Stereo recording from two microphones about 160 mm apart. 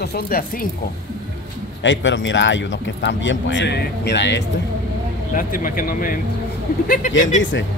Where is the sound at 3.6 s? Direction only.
90° left.